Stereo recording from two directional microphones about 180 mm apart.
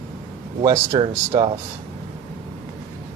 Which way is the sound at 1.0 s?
30° right (ahead or behind).